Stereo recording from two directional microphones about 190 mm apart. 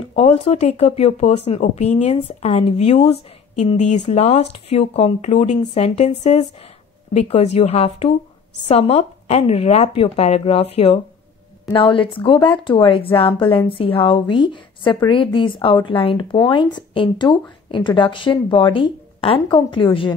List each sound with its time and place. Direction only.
0.1 s speech: 30° left (ahead or behind)